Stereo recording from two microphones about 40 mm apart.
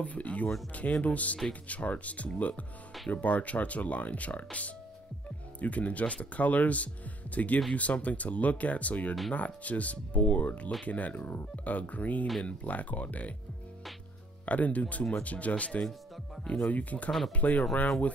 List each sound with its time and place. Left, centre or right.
0.0 s speech: left
14.4 s speech: left
16.7 s speech: left